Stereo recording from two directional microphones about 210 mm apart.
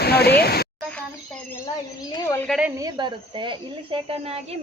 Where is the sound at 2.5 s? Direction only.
5° right (ahead or behind).